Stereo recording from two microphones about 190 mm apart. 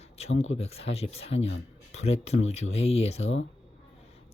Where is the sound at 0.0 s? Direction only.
35° left (ahead or behind).